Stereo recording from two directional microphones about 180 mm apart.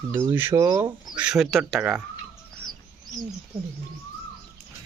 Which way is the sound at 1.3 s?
Centre (ahead or behind).